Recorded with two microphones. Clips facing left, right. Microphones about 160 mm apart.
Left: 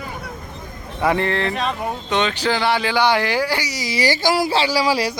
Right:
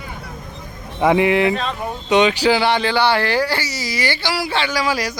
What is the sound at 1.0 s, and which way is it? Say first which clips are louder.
Speech: right 5 dB; 10° right (ahead or behind).